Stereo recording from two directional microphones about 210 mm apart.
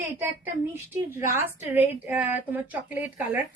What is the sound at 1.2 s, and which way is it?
A woman's voice, 10° right (ahead or behind).